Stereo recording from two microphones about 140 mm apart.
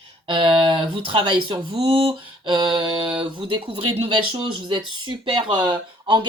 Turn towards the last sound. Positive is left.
turn(degrees=-35)  # may be behind; listen again after turning